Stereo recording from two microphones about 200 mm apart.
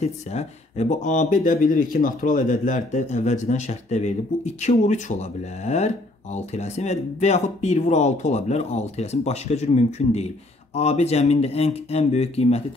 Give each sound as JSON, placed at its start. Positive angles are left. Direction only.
{"t": 0.0, "sound": "speech", "side_deg": 35}